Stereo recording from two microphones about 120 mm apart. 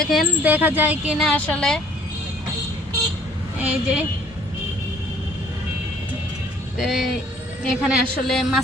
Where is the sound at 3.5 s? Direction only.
10° right (ahead or behind).